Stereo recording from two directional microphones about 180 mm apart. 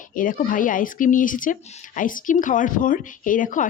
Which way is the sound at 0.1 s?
50° left (ahead or behind).